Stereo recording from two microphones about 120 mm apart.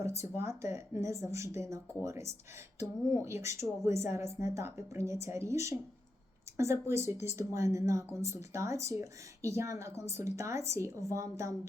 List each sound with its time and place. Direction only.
0.0 s speech: 25° right (ahead or behind)